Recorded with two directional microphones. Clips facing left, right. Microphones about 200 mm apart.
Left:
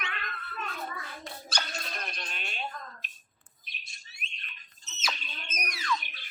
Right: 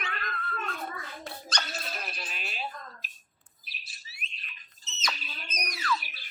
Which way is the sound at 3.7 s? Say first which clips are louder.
Right 1 dB; 5° right (ahead or behind).